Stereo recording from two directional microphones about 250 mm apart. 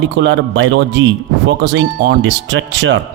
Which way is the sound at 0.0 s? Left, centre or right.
Right.